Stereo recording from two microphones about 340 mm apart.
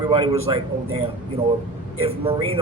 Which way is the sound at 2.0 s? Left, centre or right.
Centre.